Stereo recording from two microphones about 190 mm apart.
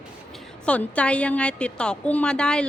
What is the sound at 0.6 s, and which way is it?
A woman's voice, 5° left (ahead or behind).